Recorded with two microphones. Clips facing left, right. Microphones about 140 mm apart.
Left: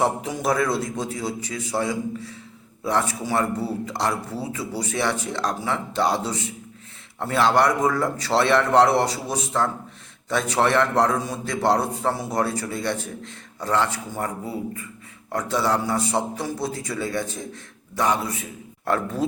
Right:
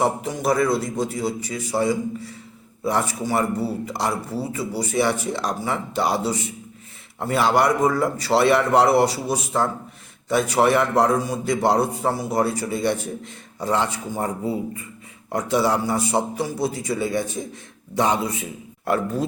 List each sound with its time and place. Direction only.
0.0 s a man's voice: centre (ahead or behind); by 18.4 s 20° right (ahead or behind)
18.9 s a man's voice: 5° right (ahead or behind)